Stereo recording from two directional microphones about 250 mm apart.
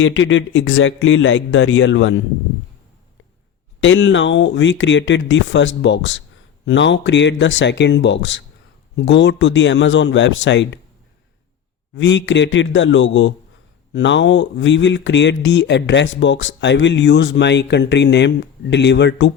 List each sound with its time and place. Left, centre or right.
0.0 s speech: left
3.8 s speech: left
11.9 s speech: left